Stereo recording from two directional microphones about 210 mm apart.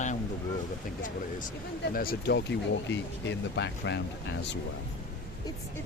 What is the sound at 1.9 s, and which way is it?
Speech, 45° left (ahead or behind).